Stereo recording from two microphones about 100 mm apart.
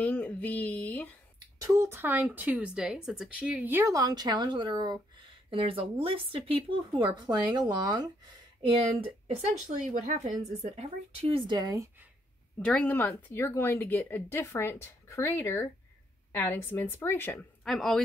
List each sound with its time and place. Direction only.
0.0 s speech: 15° left (ahead or behind)
1.6 s speech: 25° right (ahead or behind)
3.9 s a woman's voice: 45° right (ahead or behind)
8.6 s speech: 65° right (ahead or behind)
10.4 s a woman's voice: 85° right; by 11.5 s 65° right (ahead or behind)
11.5 s speech: 40° right (ahead or behind)
12.5 s speech: 10° left (ahead or behind)
17.6 s a man's voice: centre (ahead or behind)